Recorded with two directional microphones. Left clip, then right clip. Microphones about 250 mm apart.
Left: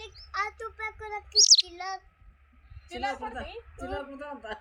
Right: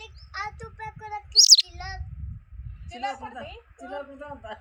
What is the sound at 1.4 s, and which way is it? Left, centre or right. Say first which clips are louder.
Child singing: right 4 dB; centre.